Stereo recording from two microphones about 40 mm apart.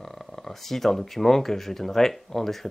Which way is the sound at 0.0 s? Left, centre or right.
Centre.